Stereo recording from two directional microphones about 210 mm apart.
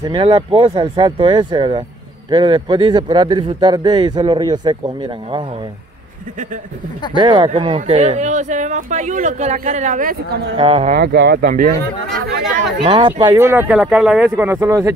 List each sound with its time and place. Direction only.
0.0 s speech: 25° right (ahead or behind)
7.2 s speech: 20° right (ahead or behind); by 10.5 s 45° right (ahead or behind)
10.5 s speech: 30° right (ahead or behind)
10.9 s speech: 50° right (ahead or behind)
12.8 s speech: 25° right (ahead or behind)
13.4 s speech: 10° right (ahead or behind)